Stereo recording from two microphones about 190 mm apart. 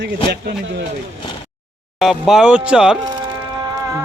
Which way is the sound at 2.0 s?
Centre (ahead or behind).